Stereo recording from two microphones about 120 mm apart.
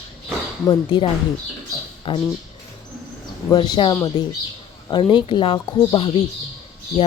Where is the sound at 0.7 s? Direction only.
40° left (ahead or behind).